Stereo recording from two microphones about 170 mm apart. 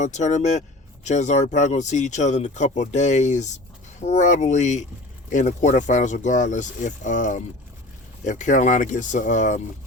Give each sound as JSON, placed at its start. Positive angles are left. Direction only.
{"t": 0.0, "sound": "speech", "side_deg": 45}